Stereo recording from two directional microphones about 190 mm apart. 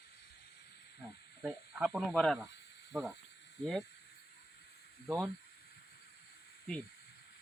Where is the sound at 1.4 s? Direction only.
5° right (ahead or behind).